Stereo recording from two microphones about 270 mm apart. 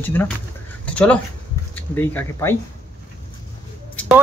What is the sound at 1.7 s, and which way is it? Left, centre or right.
Speech, centre.